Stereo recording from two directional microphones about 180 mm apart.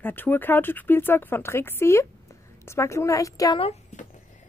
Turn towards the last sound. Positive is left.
turn(degrees=35)  # may be behind; listen again after turning